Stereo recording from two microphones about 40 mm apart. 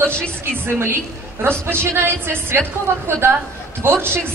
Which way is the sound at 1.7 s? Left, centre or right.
Right.